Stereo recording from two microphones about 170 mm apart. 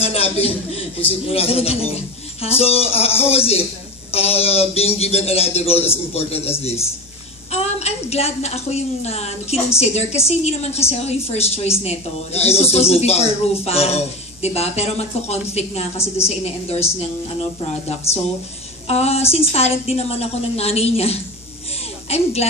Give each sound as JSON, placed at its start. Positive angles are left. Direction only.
{"t": 0.0, "sound": "a man's voice", "side_deg": 35}
{"t": 7.5, "sound": "a man's voice", "side_deg": 40}
{"t": 18.9, "sound": "a man's voice", "side_deg": 35}